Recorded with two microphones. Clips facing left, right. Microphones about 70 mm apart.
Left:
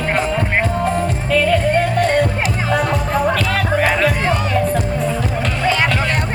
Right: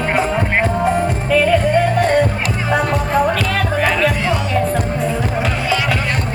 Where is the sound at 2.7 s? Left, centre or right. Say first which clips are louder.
Right 3 dB; centre.